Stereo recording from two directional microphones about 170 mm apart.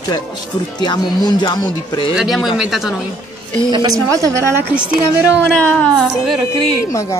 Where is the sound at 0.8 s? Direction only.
25° left (ahead or behind).